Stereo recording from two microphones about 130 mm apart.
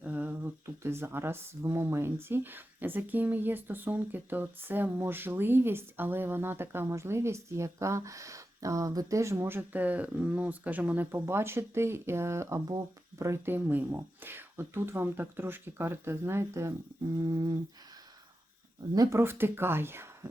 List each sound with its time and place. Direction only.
0.0 s speech: 15° right (ahead or behind)
17.2 s a sound: 30° right (ahead or behind)
18.9 s speech: 20° right (ahead or behind)